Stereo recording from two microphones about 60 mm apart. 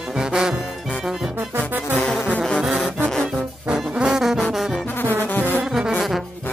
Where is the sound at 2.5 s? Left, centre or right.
Centre.